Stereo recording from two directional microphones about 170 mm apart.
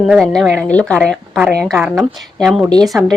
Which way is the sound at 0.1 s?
Centre (ahead or behind).